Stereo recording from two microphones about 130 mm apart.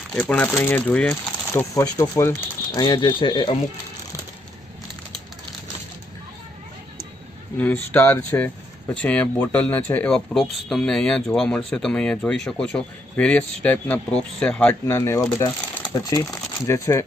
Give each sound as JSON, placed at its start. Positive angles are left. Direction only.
{"t": 0.1, "sound": "speech", "side_deg": 10}
{"t": 1.5, "sound": "speech", "side_deg": 25}
{"t": 2.7, "sound": "speech", "side_deg": 30}
{"t": 7.6, "sound": "speech", "side_deg": 15}
{"t": 14.8, "sound": "speech", "side_deg": 20}